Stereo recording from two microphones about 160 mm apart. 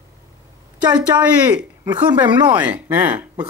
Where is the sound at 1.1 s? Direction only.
20° right (ahead or behind).